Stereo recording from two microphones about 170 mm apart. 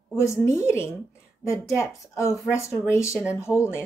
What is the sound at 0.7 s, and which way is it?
A woman's voice, 15° left (ahead or behind).